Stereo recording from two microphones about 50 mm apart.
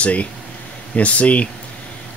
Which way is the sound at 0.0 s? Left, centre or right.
Left.